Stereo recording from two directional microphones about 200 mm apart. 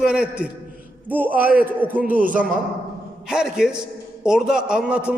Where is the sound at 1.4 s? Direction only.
45° right (ahead or behind).